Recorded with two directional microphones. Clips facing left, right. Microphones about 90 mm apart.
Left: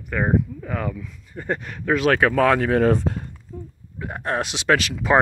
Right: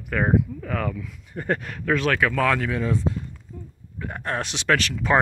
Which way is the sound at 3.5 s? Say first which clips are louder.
Left 6 dB; 30° left (ahead or behind).